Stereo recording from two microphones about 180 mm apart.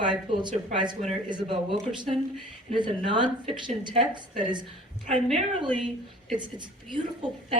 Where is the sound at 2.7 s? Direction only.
25° right (ahead or behind).